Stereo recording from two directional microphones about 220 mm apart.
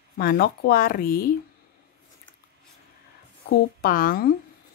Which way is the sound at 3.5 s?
45° left (ahead or behind).